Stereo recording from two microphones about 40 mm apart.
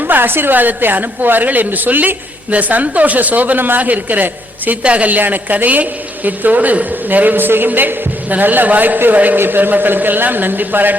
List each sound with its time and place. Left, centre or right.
0.0 s a man's voice: right
4.8 s a man's voice: right
5.0 s a man's voice: right
9.4 s a man's voice: right